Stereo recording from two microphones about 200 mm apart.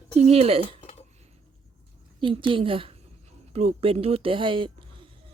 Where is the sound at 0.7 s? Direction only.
30° left (ahead or behind).